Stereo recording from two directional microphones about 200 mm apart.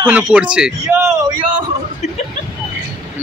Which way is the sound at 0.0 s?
5° right (ahead or behind).